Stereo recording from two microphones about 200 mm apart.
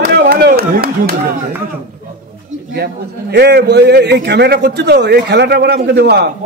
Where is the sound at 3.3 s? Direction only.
55° right (ahead or behind).